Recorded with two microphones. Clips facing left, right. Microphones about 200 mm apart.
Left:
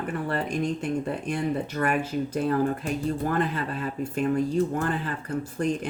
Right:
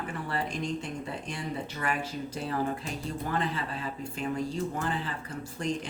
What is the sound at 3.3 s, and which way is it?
Speech, 55° left (ahead or behind).